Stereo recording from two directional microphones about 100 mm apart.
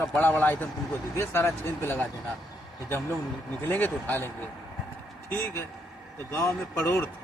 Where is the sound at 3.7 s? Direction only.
20° left (ahead or behind).